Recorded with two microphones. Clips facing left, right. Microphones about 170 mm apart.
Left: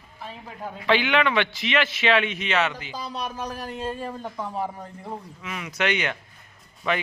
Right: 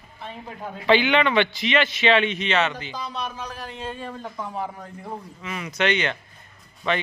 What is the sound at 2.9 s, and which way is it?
Speech, 35° left (ahead or behind).